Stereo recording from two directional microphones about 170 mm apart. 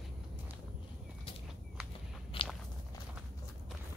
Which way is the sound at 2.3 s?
30° left (ahead or behind).